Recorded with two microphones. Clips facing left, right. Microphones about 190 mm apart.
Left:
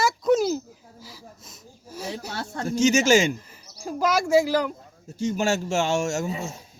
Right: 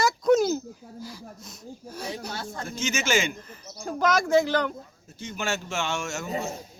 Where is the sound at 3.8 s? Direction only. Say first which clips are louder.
Left 1 dB; 5° left (ahead or behind).